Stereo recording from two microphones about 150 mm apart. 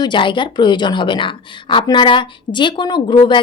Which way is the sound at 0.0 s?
30° left (ahead or behind).